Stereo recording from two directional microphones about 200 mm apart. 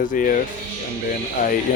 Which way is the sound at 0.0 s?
40° left (ahead or behind).